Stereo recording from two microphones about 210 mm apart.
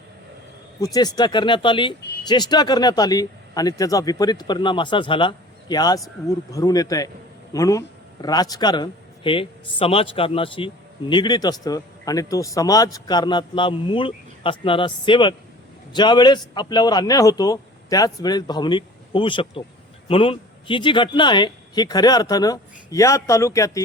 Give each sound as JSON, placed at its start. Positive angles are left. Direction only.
{"t": 0.8, "sound": "speech", "side_deg": 15}